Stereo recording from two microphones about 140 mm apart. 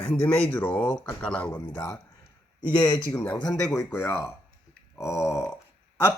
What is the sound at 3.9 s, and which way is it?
Speech, 15° left (ahead or behind).